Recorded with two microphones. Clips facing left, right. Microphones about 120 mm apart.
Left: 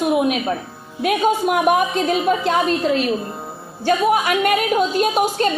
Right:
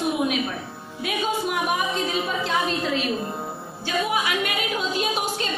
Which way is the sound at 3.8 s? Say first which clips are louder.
Left 8 dB; 50° left (ahead or behind).